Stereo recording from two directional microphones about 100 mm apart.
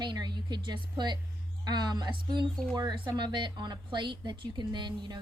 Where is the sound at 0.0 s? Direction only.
50° right (ahead or behind).